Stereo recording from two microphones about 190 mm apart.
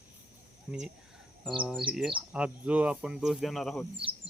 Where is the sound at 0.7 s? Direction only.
10° right (ahead or behind).